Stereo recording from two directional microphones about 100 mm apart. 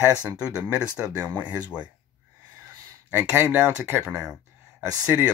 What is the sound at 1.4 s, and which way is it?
Speech, 15° right (ahead or behind).